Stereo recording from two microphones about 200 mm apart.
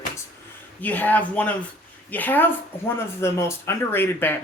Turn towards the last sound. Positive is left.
turn(degrees=10)  # may be behind; listen again after turning